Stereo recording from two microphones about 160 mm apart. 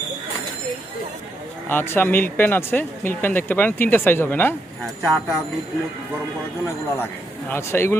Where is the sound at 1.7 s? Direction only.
15° left (ahead or behind).